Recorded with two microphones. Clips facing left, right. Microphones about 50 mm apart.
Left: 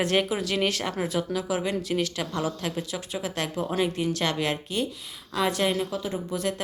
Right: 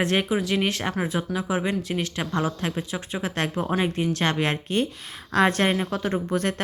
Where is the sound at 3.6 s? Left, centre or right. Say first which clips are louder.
Even; right.